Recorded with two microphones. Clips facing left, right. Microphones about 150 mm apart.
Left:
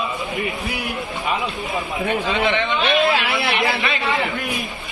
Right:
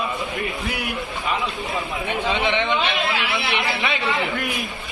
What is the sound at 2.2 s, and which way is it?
Speech, 20° right (ahead or behind).